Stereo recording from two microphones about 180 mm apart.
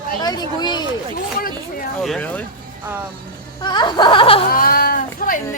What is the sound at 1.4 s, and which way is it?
Speech, 55° left (ahead or behind).